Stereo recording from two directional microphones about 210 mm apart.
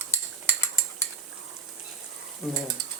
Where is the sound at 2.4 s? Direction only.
Centre (ahead or behind).